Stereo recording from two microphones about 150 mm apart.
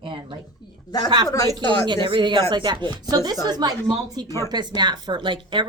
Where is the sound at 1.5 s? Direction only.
30° right (ahead or behind).